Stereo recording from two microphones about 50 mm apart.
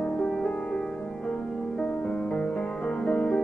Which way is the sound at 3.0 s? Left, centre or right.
Centre.